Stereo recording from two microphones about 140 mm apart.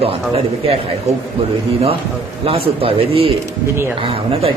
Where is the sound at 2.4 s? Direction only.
40° right (ahead or behind).